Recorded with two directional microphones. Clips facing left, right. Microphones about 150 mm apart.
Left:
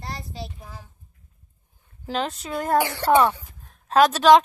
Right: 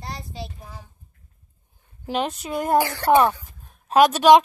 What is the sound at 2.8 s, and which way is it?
Speech, 20° left (ahead or behind).